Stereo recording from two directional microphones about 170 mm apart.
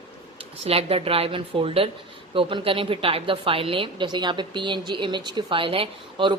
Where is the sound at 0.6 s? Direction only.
35° right (ahead or behind).